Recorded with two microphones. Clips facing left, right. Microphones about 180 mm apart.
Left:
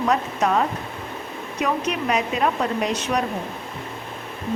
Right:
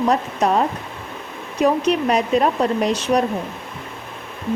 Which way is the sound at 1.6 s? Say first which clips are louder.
Right 7 dB; 35° right (ahead or behind).